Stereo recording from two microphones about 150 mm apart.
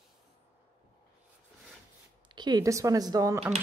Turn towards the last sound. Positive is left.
turn(degrees=-25)  # may be behind; listen again after turning